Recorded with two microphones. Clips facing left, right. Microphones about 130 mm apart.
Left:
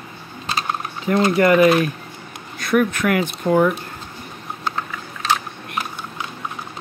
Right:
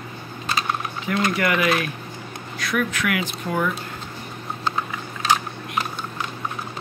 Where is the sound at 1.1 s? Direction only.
30° left (ahead or behind).